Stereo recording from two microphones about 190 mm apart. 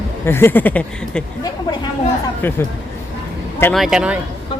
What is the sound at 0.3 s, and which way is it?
Speech, 10° left (ahead or behind).